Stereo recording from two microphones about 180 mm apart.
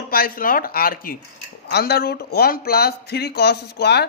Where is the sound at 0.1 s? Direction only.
55° left (ahead or behind).